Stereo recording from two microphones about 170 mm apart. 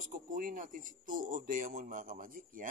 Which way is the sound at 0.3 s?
55° right (ahead or behind).